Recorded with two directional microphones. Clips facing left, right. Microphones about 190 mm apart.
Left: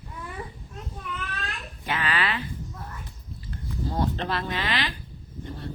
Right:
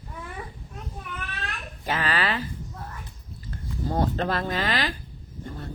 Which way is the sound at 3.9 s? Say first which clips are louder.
Right 3 dB; 45° right (ahead or behind).